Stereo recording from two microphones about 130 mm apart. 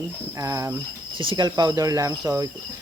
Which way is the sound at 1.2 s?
35° right (ahead or behind).